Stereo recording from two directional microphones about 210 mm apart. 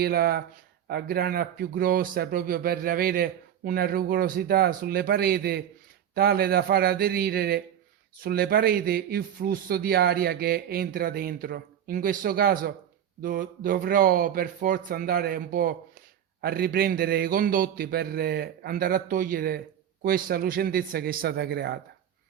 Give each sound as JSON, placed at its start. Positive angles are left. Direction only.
{"t": 0.0, "sound": "speech", "side_deg": -50}